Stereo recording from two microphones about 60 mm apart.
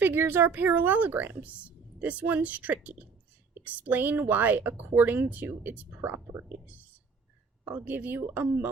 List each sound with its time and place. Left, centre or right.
0.0 s a woman's voice: right
7.6 s speech: right